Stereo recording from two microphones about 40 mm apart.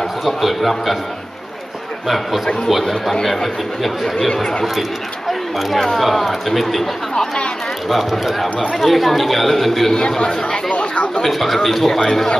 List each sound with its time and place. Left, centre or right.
0.2 s speech: centre
2.0 s speech: centre
5.6 s speech: centre
7.9 s speech: centre
9.9 s speech: centre
11.2 s speech: centre